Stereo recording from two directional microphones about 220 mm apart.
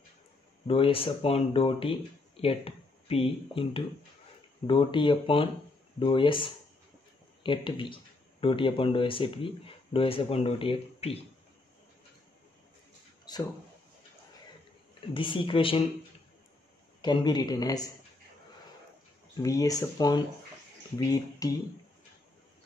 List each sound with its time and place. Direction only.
0.7 s speech: 25° left (ahead or behind)
13.2 s a sound: 20° left (ahead or behind)
15.1 s speech: 25° left (ahead or behind)
17.0 s a man's voice: 20° left (ahead or behind)
19.4 s a man's voice: 15° left (ahead or behind)